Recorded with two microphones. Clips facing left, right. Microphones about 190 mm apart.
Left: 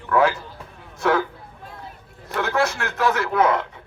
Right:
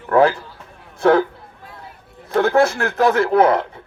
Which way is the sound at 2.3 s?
35° right (ahead or behind).